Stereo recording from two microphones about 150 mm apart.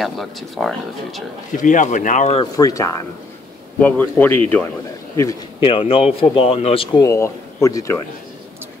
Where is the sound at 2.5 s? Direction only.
20° left (ahead or behind).